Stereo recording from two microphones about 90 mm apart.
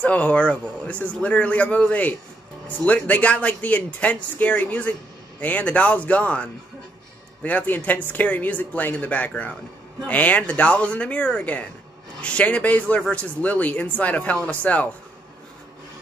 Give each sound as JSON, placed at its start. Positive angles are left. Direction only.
{"t": 0.0, "sound": "speech", "side_deg": 15}